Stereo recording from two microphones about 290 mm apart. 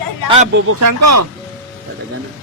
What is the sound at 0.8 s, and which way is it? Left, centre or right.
Speech, right.